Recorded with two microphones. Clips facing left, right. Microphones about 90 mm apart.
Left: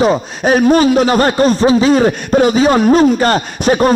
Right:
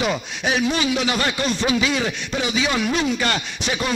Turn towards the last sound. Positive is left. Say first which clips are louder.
# left 13 dB
turn(degrees=45)  # may be behind; listen again after turning